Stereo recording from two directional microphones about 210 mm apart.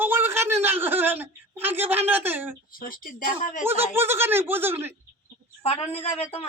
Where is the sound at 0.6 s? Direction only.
10° right (ahead or behind).